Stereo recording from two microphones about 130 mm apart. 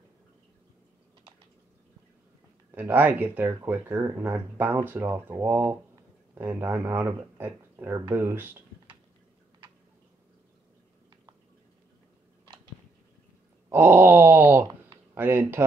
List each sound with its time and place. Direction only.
2.7 s speech: 15° right (ahead or behind)
13.7 s speech: 15° right (ahead or behind)